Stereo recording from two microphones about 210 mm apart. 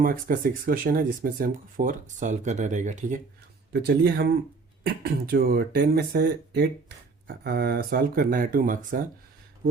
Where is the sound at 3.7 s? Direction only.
50° right (ahead or behind).